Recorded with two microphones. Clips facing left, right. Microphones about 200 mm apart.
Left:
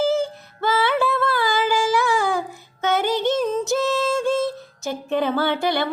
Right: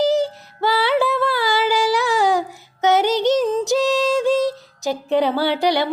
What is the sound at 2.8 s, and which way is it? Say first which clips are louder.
Music: right 4 dB; 20° right (ahead or behind).